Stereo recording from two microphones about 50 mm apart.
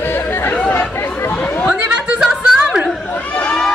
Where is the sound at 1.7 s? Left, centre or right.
Right.